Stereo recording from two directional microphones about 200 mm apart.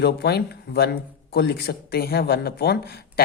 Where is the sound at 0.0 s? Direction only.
55° left (ahead or behind).